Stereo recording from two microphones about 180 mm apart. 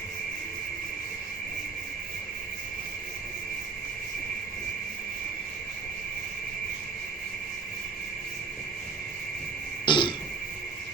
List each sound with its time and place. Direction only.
9.8 s throat clearing: 25° left (ahead or behind)